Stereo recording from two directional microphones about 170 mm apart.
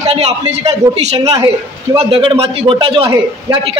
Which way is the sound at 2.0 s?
30° right (ahead or behind).